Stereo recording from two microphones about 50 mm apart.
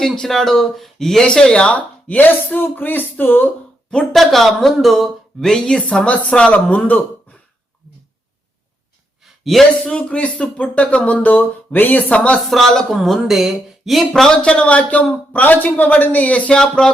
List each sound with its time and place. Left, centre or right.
0.0 s a man's voice: centre
1.7 s speech: left
4.1 s speech: centre
5.6 s a man's voice: centre
9.2 s a sound: centre
9.8 s a man's voice: left
12.5 s speech: centre
14.3 s a man's voice: left
16.6 s speech: centre